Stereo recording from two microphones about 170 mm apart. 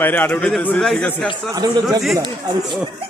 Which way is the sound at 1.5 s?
20° right (ahead or behind).